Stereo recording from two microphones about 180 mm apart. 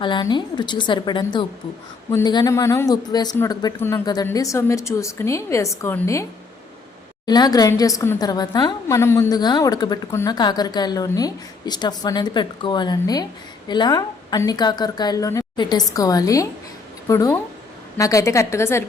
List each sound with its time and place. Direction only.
0.0 s a woman's voice: 25° left (ahead or behind)
7.3 s a woman's voice: 20° left (ahead or behind)